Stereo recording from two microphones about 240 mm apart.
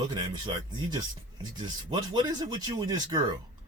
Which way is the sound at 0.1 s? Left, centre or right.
Centre.